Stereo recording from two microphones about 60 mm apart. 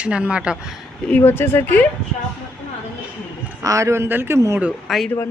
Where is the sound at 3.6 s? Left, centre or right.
Right.